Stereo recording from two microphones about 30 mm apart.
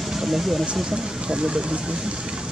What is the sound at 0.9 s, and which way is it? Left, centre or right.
Speech, right.